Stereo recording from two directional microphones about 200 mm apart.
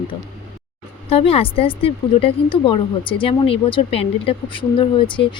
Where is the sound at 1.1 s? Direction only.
30° left (ahead or behind).